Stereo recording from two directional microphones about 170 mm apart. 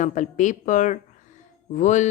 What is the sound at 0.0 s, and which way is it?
A woman's voice, 45° left (ahead or behind).